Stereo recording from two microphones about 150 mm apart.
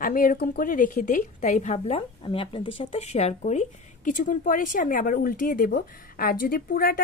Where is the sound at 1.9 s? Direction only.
40° left (ahead or behind).